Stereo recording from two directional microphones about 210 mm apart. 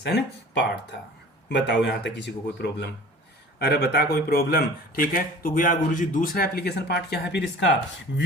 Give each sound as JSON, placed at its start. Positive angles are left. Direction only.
{"t": 0.0, "sound": "speech", "side_deg": 55}